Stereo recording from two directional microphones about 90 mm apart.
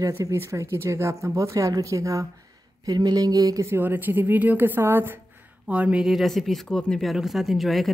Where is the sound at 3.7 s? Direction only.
20° right (ahead or behind).